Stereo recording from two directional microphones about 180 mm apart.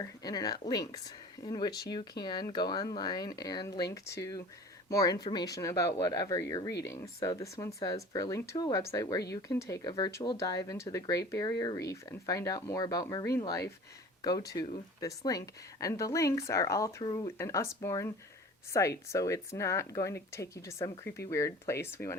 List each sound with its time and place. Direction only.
0.0 s speech: 20° left (ahead or behind)